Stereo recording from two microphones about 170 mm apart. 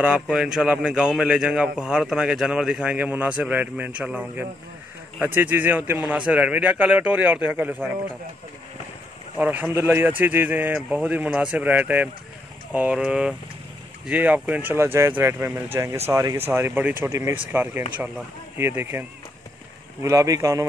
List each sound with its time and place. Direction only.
0.0 s a man's voice: 5° right (ahead or behind)
9.4 s a man's voice: 10° right (ahead or behind)